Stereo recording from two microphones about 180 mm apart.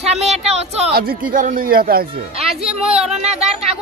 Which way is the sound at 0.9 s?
55° right (ahead or behind).